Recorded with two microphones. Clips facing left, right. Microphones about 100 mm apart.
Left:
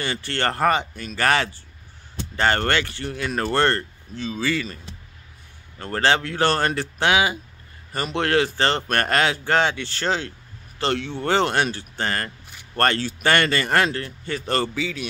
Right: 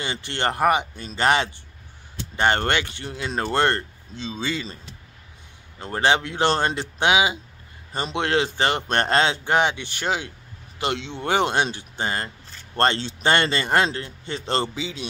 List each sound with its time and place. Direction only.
0.0 s speech: 20° right (ahead or behind)
5.8 s speech: 15° right (ahead or behind)